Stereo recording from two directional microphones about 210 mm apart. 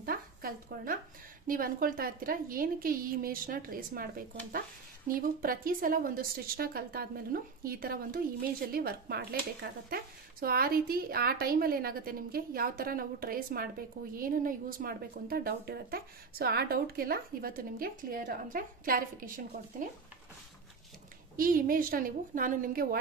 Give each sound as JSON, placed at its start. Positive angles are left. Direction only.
{"t": 0.0, "sound": "a sound", "side_deg": -45}
{"t": 1.5, "sound": "speech", "side_deg": -40}
{"t": 21.4, "sound": "speech", "side_deg": -40}